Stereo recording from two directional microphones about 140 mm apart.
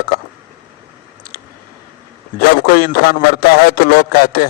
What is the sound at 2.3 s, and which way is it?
A man's voice, 90° left.